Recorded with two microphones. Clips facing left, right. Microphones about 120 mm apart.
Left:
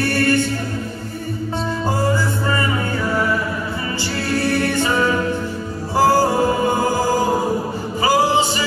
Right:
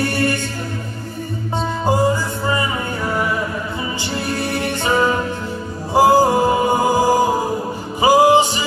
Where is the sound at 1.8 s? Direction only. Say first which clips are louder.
Right 3 dB; 15° right (ahead or behind).